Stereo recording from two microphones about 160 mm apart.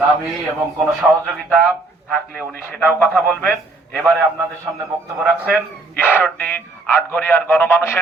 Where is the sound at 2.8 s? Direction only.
Centre (ahead or behind).